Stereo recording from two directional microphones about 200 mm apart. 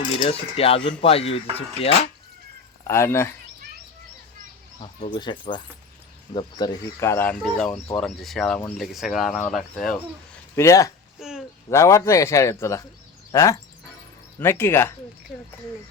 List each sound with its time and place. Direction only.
0.2 s speech: 30° left (ahead or behind)
2.8 s speech: 15° left (ahead or behind)
5.1 s speech: 25° left (ahead or behind); by 10.0 s centre (ahead or behind)
10.5 s speech: 15° left (ahead or behind)
11.2 s a sound: 5° right (ahead or behind)
11.7 s speech: 15° left (ahead or behind)